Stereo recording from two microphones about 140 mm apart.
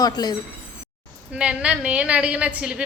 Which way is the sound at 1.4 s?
10° right (ahead or behind).